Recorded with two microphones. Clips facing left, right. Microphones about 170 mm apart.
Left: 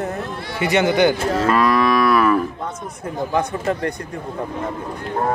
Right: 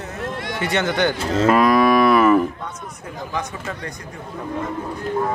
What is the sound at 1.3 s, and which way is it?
Moo, 20° right (ahead or behind).